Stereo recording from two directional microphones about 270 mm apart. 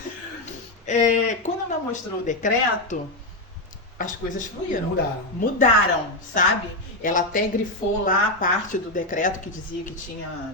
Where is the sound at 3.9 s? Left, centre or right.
Left.